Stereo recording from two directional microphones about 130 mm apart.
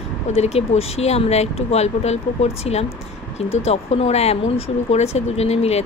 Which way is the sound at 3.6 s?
55° left (ahead or behind).